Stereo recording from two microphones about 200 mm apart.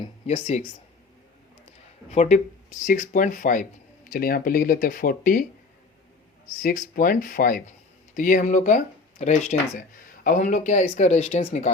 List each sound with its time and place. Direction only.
0.0 s speech: 30° left (ahead or behind)
2.0 s speech: 35° left (ahead or behind)
6.6 s speech: 45° left (ahead or behind)